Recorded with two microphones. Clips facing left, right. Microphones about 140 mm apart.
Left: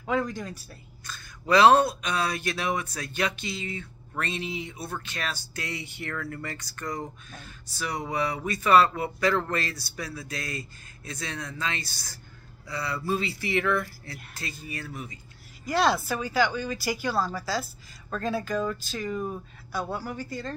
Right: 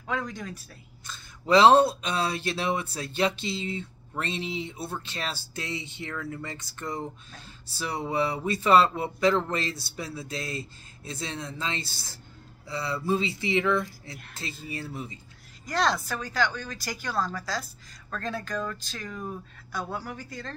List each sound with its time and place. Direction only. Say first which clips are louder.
0.0 s speech: left 4 dB; 5° left (ahead or behind)
1.0 s speech: even; 25° right (ahead or behind)
15.6 s speech: left 3 dB; 5° left (ahead or behind)